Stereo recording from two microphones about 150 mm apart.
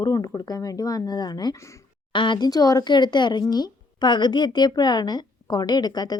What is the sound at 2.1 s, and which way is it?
Speech, 30° left (ahead or behind).